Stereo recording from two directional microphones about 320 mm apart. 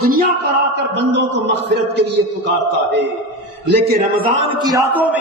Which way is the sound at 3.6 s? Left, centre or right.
Right.